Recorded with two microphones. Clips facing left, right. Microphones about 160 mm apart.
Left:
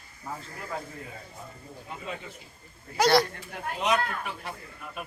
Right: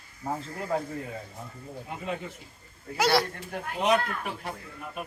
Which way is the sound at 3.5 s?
45° right (ahead or behind).